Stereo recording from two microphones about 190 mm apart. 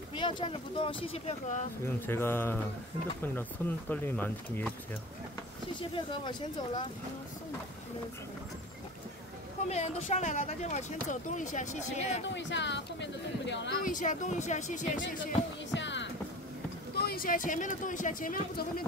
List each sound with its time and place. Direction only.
0.1 s speech: 25° left (ahead or behind)
1.9 s speech: 10° left (ahead or behind)
5.8 s speech: 25° left (ahead or behind)
9.7 s speech: 35° left (ahead or behind)
12.4 s speech: 70° left (ahead or behind)
13.8 s speech: 40° left (ahead or behind)
15.7 s music: 70° left (ahead or behind)
16.9 s speech: 55° left (ahead or behind)